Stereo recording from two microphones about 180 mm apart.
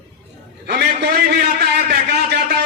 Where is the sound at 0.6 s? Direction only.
65° right (ahead or behind).